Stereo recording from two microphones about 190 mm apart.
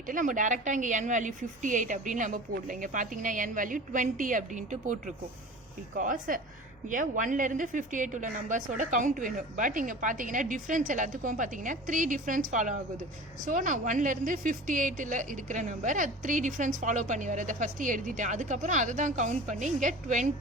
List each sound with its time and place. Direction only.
0.1 s a woman's voice: 45° right (ahead or behind)